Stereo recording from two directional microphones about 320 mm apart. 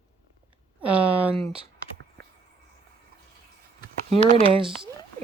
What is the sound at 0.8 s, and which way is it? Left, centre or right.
Speech, centre.